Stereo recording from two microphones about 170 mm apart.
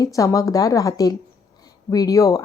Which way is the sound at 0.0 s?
20° left (ahead or behind).